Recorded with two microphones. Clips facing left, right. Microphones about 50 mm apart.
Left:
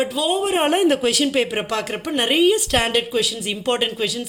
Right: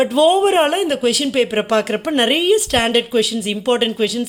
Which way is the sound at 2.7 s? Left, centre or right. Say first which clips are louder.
Right 3 dB; centre.